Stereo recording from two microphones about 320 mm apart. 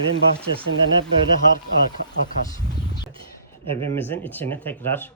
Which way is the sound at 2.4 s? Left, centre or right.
Centre.